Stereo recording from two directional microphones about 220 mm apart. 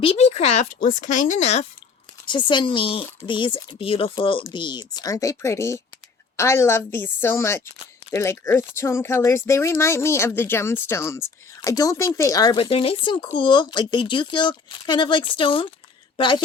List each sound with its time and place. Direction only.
0.0 s speech: 25° left (ahead or behind)
2.2 s speech: 20° left (ahead or behind)